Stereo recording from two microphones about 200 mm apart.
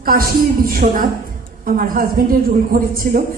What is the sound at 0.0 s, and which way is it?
A woman's voice, 45° right (ahead or behind).